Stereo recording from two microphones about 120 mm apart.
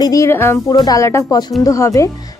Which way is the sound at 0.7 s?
35° left (ahead or behind).